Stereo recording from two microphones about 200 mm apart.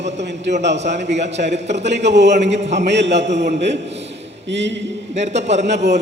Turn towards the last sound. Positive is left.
turn(degrees=-60)  # may be behind; listen again after turning